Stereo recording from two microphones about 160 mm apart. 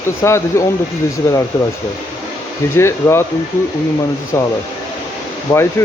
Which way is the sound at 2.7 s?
15° left (ahead or behind).